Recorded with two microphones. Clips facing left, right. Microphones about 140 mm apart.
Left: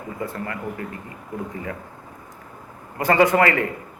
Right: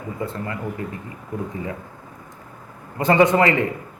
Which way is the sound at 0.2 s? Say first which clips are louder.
Right 1 dB; 25° right (ahead or behind).